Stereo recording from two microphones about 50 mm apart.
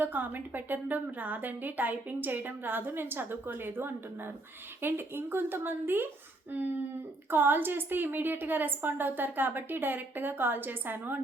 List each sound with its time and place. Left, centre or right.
0.0 s a woman's voice: right